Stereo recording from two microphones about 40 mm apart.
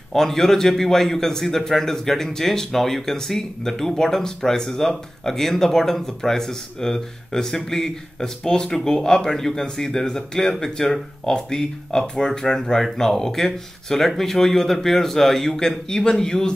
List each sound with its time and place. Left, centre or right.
0.1 s a man's voice: centre